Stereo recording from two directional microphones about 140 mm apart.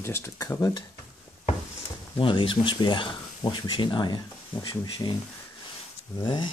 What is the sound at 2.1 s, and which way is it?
Speech, 35° left (ahead or behind).